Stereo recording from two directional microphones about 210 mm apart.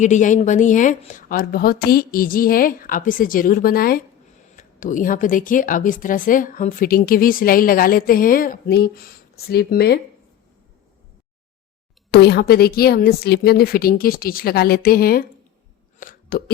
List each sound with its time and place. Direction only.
0.0 s speech: 35° left (ahead or behind)
12.1 s speech: 50° left (ahead or behind)
16.0 s a sound: 40° left (ahead or behind)